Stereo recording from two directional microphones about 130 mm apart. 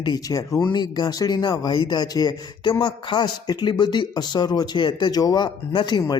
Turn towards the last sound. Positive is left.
turn(degrees=35)  # may be behind; listen again after turning